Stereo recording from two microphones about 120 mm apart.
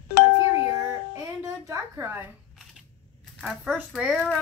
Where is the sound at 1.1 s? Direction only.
25° right (ahead or behind).